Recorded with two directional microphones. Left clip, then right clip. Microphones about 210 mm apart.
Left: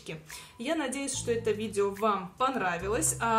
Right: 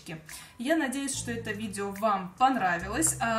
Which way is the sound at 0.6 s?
25° left (ahead or behind).